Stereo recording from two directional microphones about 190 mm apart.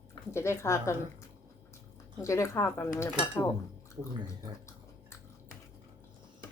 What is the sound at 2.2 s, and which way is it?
Speech, 15° left (ahead or behind).